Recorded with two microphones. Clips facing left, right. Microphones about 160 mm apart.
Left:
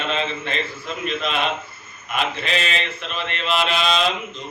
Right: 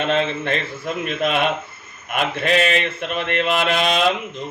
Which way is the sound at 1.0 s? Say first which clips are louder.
Right 3 dB; 55° right (ahead or behind).